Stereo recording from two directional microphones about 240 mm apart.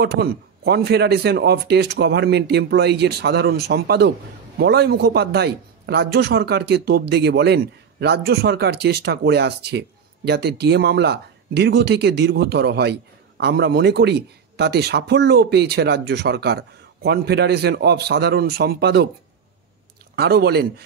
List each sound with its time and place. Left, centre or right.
0.0 s a man's voice: right
20.2 s speech: right